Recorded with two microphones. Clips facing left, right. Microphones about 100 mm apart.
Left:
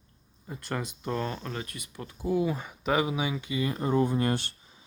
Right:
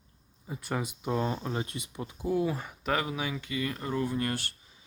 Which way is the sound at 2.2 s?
Centre (ahead or behind).